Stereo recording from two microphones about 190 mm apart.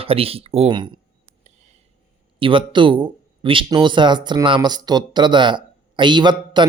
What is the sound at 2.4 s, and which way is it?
Speech, 25° right (ahead or behind).